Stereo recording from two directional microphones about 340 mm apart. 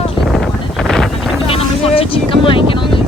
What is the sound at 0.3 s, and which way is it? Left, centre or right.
Wind noise, centre.